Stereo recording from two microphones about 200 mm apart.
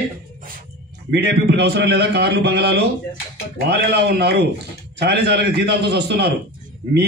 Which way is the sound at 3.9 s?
55° right (ahead or behind).